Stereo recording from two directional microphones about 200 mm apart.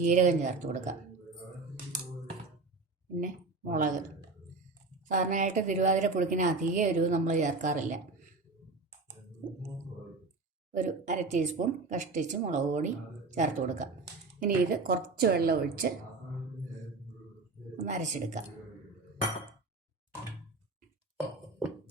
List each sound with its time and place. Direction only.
0.0 s a woman's voice: 40° right (ahead or behind)
3.2 s speech: 40° right (ahead or behind)
5.0 s a woman's voice: 40° right (ahead or behind)
10.7 s a woman's voice: 40° right (ahead or behind)
17.7 s speech: 35° right (ahead or behind)